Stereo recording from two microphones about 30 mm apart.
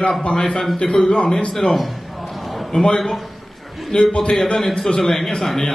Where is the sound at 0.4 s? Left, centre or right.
Left.